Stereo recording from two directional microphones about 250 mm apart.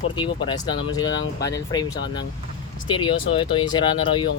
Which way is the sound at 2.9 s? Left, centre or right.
Centre.